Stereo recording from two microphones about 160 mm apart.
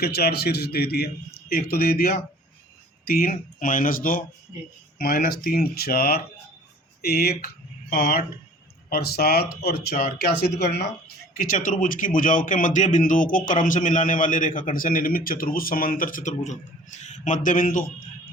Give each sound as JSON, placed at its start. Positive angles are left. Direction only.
{"t": 0.0, "sound": "a man's voice", "side_deg": 80}
{"t": 3.1, "sound": "a man's voice", "side_deg": 65}
{"t": 8.9, "sound": "speech", "side_deg": 75}
{"t": 11.3, "sound": "a man's voice", "side_deg": 60}